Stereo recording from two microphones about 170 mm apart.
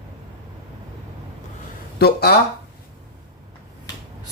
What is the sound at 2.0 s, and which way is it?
Speech, 70° left (ahead or behind).